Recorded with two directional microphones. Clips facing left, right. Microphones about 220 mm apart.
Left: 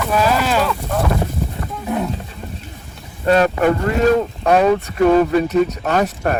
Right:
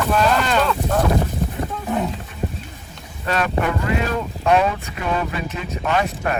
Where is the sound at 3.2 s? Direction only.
40° left (ahead or behind).